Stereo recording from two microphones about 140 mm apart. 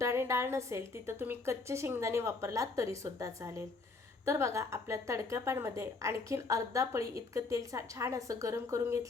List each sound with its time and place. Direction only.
0.0 s a woman's voice: 20° right (ahead or behind)